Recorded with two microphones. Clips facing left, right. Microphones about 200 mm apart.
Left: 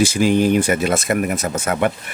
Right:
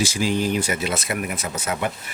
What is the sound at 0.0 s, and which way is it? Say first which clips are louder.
Speech: left 7 dB; 55° left (ahead or behind).